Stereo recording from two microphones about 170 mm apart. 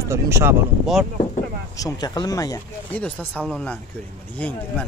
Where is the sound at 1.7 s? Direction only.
20° left (ahead or behind).